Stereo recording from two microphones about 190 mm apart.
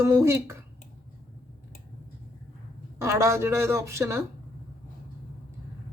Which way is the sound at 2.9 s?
15° right (ahead or behind).